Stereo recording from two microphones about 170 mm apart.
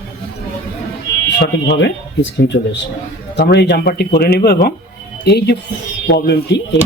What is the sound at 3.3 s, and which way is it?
Speech, 80° left.